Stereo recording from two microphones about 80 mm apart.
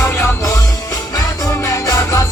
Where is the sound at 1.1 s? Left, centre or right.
Left.